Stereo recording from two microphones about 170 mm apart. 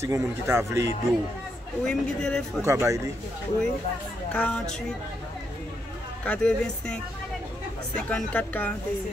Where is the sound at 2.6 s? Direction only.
15° right (ahead or behind).